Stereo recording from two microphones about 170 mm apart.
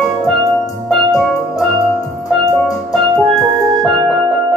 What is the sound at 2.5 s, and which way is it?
Music, centre (ahead or behind).